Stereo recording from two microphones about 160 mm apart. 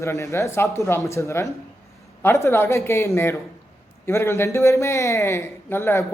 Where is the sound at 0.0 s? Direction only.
20° left (ahead or behind).